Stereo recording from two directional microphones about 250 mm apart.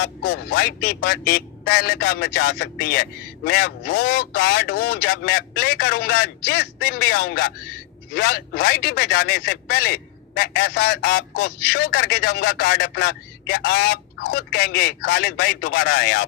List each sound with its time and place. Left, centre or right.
0.0 s speech: left